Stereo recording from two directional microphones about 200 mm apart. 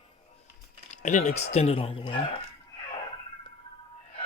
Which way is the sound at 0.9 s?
35° left (ahead or behind).